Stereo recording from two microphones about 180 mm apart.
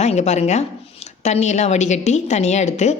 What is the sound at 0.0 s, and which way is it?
Speech, 40° left (ahead or behind).